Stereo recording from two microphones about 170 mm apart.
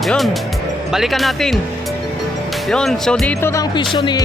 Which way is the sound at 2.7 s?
5° left (ahead or behind).